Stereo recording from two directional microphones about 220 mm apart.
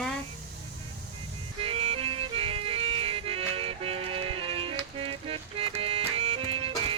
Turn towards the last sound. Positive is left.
turn(degrees=-25)  # may be behind; listen again after turning